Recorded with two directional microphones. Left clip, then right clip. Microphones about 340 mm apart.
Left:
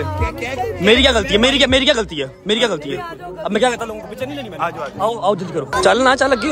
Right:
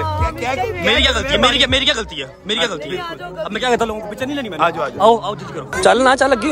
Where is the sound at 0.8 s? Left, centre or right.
Centre.